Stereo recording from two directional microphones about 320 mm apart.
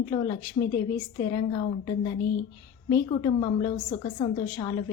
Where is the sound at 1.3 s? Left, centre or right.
Centre.